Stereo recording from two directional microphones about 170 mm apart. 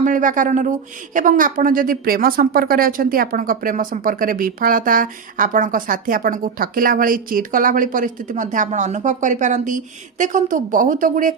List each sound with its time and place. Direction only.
0.0 s speech: 50° right (ahead or behind)